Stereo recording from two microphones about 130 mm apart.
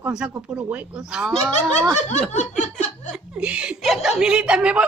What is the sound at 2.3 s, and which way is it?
Laughter, 65° left (ahead or behind).